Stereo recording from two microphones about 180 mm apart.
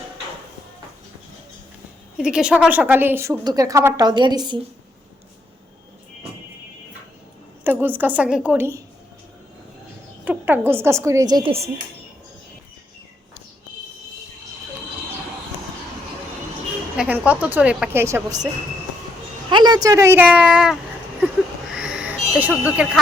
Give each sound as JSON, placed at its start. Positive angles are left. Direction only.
{"t": 2.1, "sound": "a woman's voice", "side_deg": -5}
{"t": 7.6, "sound": "a woman's voice", "side_deg": -10}
{"t": 10.2, "sound": "a woman's voice", "side_deg": -10}
{"t": 17.0, "sound": "a woman's voice", "side_deg": -10}
{"t": 19.5, "sound": "a woman's voice", "side_deg": -25}
{"t": 21.7, "sound": "a sound", "side_deg": -5}